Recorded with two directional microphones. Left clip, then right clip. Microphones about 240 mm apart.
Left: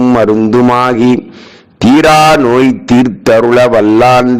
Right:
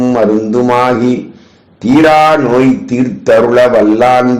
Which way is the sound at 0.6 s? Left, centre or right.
Left.